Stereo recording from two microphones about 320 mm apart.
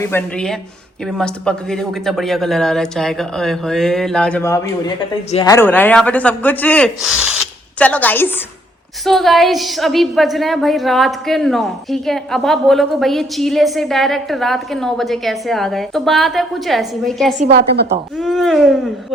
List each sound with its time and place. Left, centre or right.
0.0 s a woman's voice: centre
17.4 s a woman's voice: right
18.2 s a woman's voice: centre